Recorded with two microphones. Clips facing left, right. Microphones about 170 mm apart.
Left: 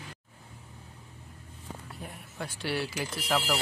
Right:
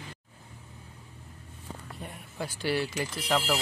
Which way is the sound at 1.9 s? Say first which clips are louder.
Right 3 dB; centre (ahead or behind).